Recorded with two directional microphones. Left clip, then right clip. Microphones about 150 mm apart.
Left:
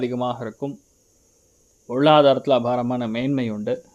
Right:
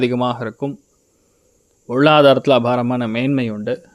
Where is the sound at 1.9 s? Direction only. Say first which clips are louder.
Right 4 dB; 25° right (ahead or behind).